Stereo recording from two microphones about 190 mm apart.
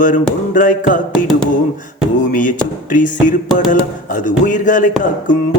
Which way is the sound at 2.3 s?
45° left (ahead or behind).